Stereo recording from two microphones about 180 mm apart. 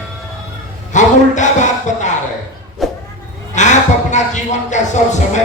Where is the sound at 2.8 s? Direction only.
Centre (ahead or behind).